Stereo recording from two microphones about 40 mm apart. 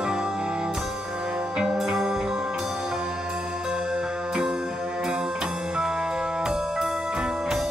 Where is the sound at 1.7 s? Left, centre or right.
Centre.